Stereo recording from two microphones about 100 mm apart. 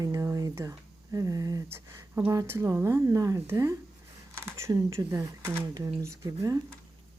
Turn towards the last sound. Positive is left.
turn(degrees=-35)  # may be behind; listen again after turning